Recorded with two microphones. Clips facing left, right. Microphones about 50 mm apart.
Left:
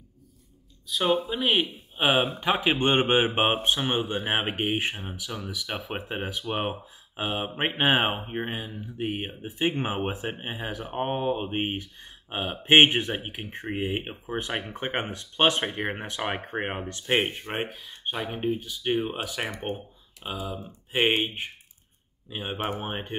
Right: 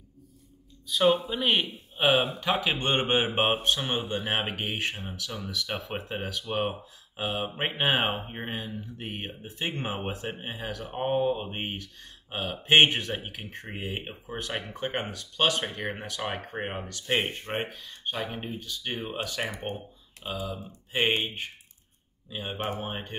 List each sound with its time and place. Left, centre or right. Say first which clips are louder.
0.8 s speech: right 1 dB; centre
2.6 s speech: left 4 dB; left
17.6 s speech: left 1 dB; centre
20.9 s speech: left 3 dB; centre
22.5 s speech: left 2 dB; left